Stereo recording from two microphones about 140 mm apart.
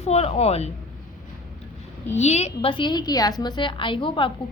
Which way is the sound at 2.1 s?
50° left (ahead or behind).